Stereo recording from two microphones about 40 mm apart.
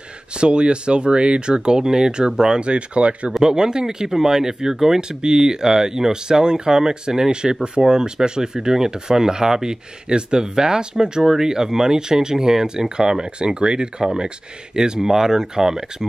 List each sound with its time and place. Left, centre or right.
0.4 s speech: right
3.4 s speech: centre